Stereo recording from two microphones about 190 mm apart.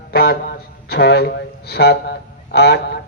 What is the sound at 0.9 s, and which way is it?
A man's voice, 60° left (ahead or behind).